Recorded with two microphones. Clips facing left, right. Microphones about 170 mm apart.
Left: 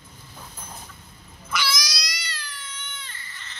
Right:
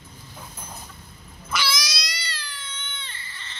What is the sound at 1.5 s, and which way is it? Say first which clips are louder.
Cat: right 1 dB; 30° right (ahead or behind).